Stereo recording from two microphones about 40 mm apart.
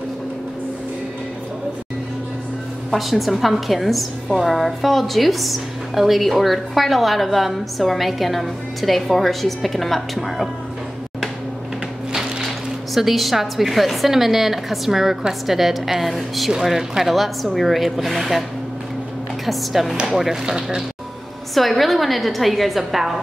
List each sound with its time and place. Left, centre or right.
2.9 s a woman's voice: centre
12.1 s a sound: centre
12.4 s a woman's voice: centre
19.4 s a woman's voice: centre
21.5 s a woman's voice: centre